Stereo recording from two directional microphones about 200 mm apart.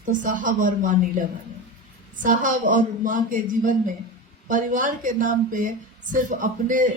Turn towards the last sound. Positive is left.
turn(degrees=-40)  # may be behind; listen again after turning